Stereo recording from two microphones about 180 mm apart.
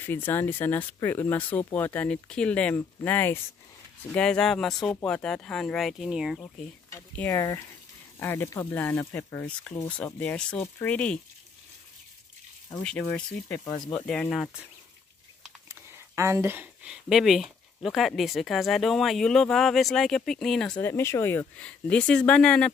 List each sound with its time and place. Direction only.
0.0 s speech: 10° left (ahead or behind)
6.4 s speech: 15° left (ahead or behind)
12.8 s speech: 5° left (ahead or behind)
13.7 s speech: 20° left (ahead or behind)
13.9 s speech: 5° left (ahead or behind)
15.7 s speech: 15° right (ahead or behind); by 20.7 s 5° left (ahead or behind)
20.8 s speech: 15° left (ahead or behind)